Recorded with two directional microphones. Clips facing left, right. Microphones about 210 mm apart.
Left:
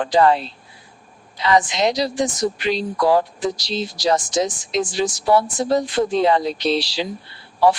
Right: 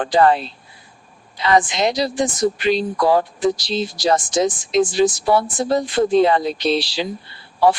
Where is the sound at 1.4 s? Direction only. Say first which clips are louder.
Right 1 dB; 55° right (ahead or behind).